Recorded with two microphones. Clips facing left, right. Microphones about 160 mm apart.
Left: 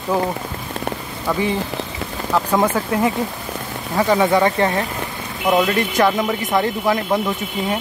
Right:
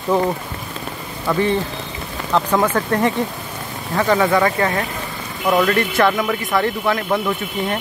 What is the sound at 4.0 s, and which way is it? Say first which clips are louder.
Speech: even; 20° left (ahead or behind).